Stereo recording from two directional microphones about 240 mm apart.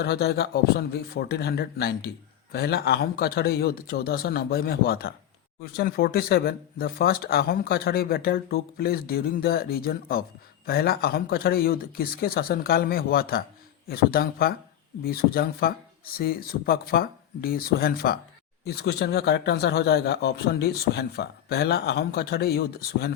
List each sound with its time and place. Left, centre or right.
0.0 s speech: left